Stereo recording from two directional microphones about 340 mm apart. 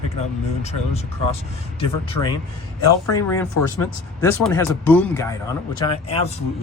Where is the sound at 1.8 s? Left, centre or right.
Centre.